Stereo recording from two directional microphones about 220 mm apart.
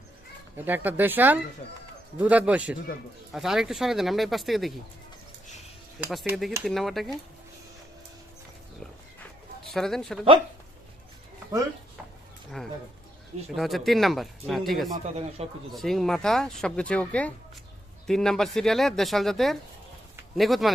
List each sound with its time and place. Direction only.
0.5 s speech: 10° right (ahead or behind)
6.0 s speech: 5° right (ahead or behind)
9.7 s speech: centre (ahead or behind)
12.6 s speech: centre (ahead or behind)
14.9 s speech: 30° right (ahead or behind)
15.7 s speech: centre (ahead or behind)